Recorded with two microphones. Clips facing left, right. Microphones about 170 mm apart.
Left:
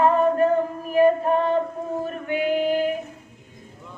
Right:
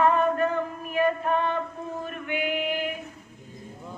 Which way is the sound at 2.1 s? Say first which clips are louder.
Left 5 dB; 35° left (ahead or behind).